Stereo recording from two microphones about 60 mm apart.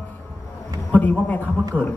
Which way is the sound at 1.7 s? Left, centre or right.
Right.